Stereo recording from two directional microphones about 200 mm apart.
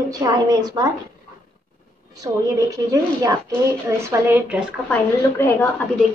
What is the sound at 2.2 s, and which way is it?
A woman's voice, 20° right (ahead or behind).